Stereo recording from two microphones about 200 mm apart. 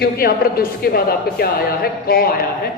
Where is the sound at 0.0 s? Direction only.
50° left (ahead or behind).